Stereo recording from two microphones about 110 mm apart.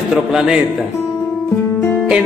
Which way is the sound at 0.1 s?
5° right (ahead or behind).